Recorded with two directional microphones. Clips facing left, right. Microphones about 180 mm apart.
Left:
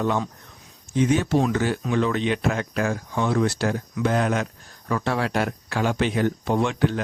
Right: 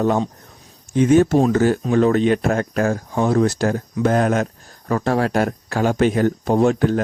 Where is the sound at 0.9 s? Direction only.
50° right (ahead or behind).